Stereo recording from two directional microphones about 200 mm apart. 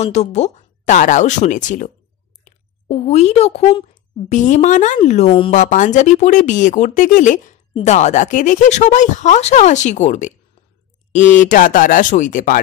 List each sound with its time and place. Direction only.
0.0 s speech: 35° left (ahead or behind)
2.9 s speech: 30° left (ahead or behind)